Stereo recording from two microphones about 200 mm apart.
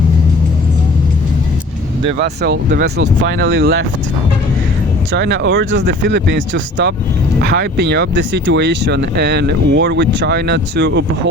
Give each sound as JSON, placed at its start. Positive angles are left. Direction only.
{"t": 2.2, "sound": "speech", "side_deg": -55}
{"t": 5.1, "sound": "speech", "side_deg": -60}